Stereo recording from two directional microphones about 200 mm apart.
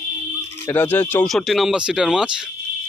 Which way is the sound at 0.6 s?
10° left (ahead or behind).